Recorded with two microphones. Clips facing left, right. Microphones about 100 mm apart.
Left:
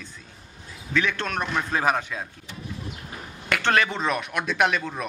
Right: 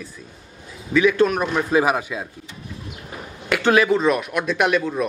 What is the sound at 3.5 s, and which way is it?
A man's voice, 5° right (ahead or behind).